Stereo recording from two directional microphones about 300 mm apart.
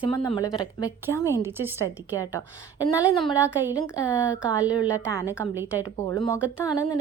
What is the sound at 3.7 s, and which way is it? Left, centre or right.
Speech, centre.